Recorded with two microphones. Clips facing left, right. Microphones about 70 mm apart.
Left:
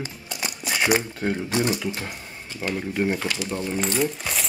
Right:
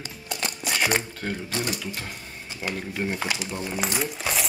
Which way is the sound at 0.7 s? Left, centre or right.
Centre.